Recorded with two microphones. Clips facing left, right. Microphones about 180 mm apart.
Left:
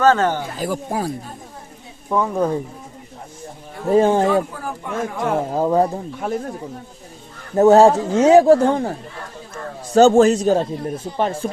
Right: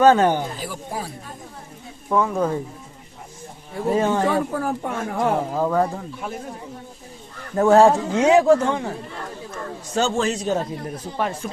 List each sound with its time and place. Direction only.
0.0 s speech: 15° right (ahead or behind)
0.6 s a man's voice: 45° left (ahead or behind)
2.0 s speech: 15° left (ahead or behind)
3.9 s speech: 35° left (ahead or behind)
4.5 s speech: 45° right (ahead or behind)
5.5 s speech: 20° left (ahead or behind)
7.5 s speech: 20° left (ahead or behind)
9.9 s a man's voice: 45° left (ahead or behind)
10.6 s speech: 25° left (ahead or behind)